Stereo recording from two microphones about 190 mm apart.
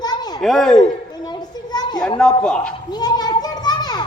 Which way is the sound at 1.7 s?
20° left (ahead or behind).